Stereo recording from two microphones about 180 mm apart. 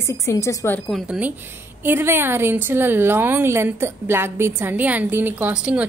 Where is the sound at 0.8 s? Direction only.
Centre (ahead or behind).